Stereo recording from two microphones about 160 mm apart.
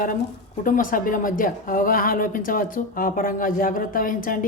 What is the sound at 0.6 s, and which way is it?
A woman's voice, 60° left (ahead or behind).